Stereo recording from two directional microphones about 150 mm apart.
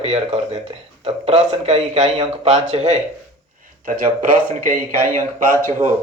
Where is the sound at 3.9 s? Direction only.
65° right (ahead or behind).